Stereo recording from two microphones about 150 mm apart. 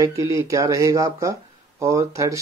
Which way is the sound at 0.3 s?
20° right (ahead or behind).